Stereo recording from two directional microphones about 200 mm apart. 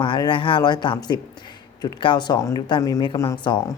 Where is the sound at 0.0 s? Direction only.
25° left (ahead or behind).